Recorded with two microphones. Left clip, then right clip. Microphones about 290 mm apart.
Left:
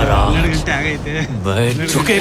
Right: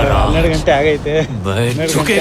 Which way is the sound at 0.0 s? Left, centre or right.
Centre.